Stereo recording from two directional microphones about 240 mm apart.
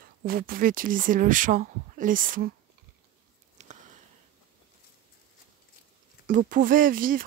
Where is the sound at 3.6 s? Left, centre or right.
Right.